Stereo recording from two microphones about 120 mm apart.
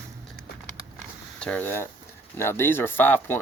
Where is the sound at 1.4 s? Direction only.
15° left (ahead or behind).